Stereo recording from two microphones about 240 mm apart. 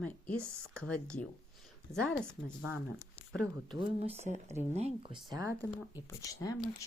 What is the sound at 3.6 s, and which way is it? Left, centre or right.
Speech, right.